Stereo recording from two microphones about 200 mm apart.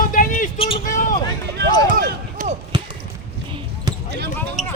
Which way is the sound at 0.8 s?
40° left (ahead or behind).